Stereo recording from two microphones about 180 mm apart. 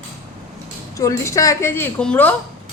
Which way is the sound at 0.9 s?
15° left (ahead or behind).